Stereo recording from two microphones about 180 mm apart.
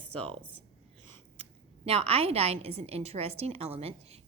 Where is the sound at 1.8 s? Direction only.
35° right (ahead or behind).